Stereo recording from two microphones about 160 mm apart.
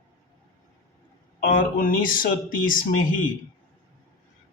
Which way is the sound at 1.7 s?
60° left (ahead or behind).